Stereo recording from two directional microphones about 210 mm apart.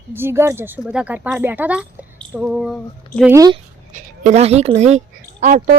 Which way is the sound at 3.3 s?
15° right (ahead or behind).